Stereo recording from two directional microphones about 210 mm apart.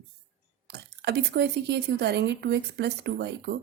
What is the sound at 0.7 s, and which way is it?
Speech, 50° right (ahead or behind).